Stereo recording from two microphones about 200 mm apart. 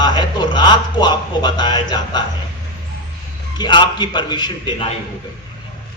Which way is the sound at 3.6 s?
20° left (ahead or behind).